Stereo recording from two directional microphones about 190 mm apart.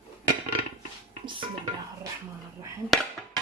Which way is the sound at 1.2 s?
25° right (ahead or behind).